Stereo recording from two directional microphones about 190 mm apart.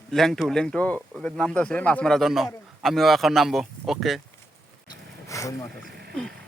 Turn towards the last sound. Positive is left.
turn(degrees=15)  # may be behind; listen again after turning